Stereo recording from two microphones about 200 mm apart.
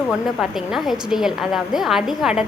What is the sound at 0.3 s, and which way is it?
A woman's voice, centre (ahead or behind).